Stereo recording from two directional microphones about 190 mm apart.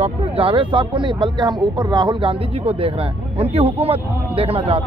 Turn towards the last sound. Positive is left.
turn(degrees=-30)  # may be behind; listen again after turning